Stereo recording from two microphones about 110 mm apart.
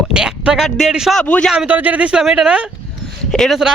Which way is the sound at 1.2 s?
10° left (ahead or behind).